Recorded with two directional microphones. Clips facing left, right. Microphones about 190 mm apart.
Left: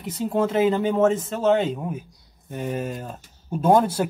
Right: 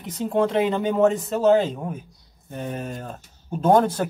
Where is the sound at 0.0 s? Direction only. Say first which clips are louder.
Right 1 dB; 5° left (ahead or behind).